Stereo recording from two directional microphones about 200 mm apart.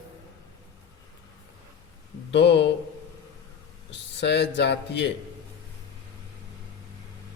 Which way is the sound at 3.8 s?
60° left (ahead or behind).